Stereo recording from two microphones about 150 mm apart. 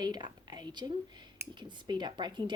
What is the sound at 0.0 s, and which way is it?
A woman's voice, 30° right (ahead or behind).